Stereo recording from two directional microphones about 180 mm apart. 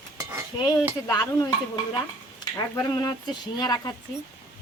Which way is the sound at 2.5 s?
20° left (ahead or behind).